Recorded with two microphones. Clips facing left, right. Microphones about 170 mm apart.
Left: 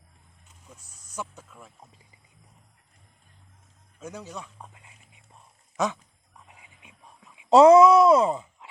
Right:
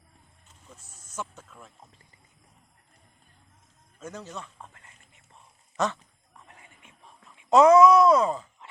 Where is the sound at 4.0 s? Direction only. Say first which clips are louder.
Left 1 dB; 10° left (ahead or behind).